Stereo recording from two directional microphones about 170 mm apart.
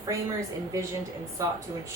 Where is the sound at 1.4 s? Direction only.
20° right (ahead or behind).